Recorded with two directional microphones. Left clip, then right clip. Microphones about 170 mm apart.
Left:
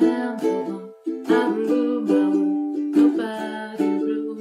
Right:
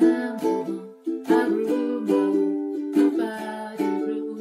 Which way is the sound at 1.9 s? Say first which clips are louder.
Left 2 dB; 20° left (ahead or behind).